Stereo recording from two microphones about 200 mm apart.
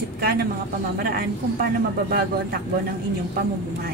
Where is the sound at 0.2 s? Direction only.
50° right (ahead or behind).